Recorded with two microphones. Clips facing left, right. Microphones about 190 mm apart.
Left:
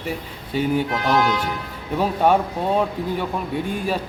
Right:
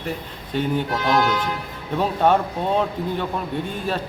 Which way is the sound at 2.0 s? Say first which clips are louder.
Left 1 dB; 10° left (ahead or behind).